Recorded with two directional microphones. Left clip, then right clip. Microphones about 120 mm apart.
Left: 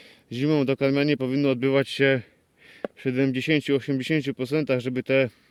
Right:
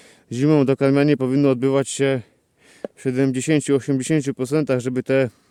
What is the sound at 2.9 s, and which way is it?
Speech, 50° right (ahead or behind).